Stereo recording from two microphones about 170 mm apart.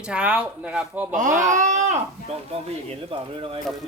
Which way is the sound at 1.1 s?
50° right (ahead or behind).